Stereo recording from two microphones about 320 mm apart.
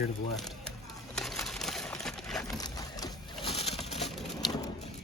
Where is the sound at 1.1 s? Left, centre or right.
Centre.